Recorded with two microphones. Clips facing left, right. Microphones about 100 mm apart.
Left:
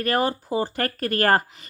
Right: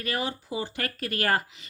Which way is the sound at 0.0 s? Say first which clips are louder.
Left 8 dB; 50° left (ahead or behind).